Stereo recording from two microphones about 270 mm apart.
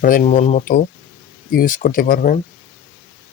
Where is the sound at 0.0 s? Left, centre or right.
Left.